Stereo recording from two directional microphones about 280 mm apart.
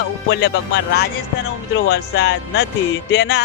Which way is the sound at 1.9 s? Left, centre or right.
Left.